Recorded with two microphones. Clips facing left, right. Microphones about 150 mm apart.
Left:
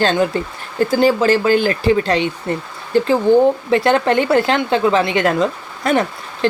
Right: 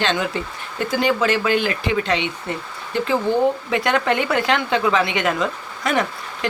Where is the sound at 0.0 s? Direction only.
40° left (ahead or behind).